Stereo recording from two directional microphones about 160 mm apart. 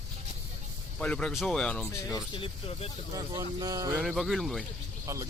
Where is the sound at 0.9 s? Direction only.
5° left (ahead or behind).